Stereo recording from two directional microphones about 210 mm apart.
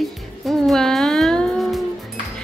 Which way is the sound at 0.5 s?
Centre (ahead or behind).